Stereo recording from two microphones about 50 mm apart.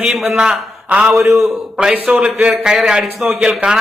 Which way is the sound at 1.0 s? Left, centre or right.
Centre.